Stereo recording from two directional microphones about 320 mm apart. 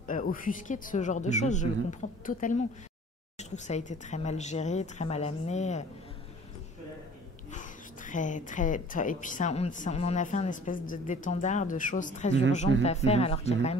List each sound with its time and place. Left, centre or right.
0.0 s speech: left
7.5 s speech: left